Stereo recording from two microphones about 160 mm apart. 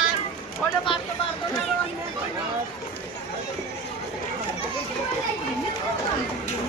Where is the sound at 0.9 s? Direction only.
35° left (ahead or behind).